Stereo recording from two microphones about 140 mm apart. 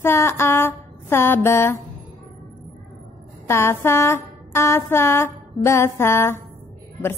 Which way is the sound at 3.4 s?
20° left (ahead or behind).